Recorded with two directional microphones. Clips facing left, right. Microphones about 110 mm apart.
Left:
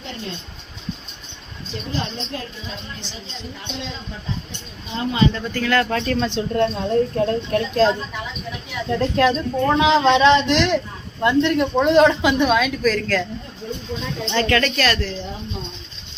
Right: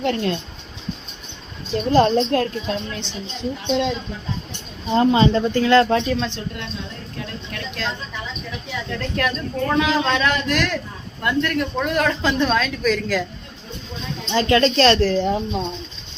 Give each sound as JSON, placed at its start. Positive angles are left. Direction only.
{"t": 0.0, "sound": "speech", "side_deg": -75}
{"t": 1.7, "sound": "a woman's voice", "side_deg": -45}
{"t": 4.9, "sound": "speech", "side_deg": -35}
{"t": 6.5, "sound": "speech", "side_deg": 45}
{"t": 8.9, "sound": "a man's voice", "side_deg": 25}
{"t": 14.3, "sound": "speech", "side_deg": -20}
{"t": 15.0, "sound": "speech", "side_deg": -55}